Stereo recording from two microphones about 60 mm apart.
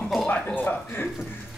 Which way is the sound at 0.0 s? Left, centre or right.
Centre.